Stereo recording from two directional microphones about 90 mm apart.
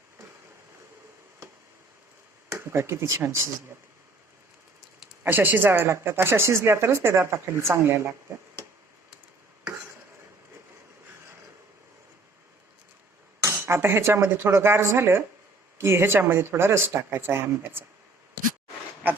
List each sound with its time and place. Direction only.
2.5 s speech: 30° right (ahead or behind)
5.2 s speech: 20° right (ahead or behind)
13.4 s speech: 25° right (ahead or behind)